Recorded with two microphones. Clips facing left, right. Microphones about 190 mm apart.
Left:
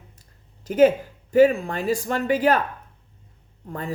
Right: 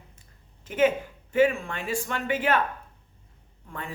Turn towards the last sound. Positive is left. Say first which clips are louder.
# left 7 dB
turn(degrees=40)  # may be behind; listen again after turning